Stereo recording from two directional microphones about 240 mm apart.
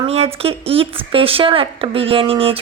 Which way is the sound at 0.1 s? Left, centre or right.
Right.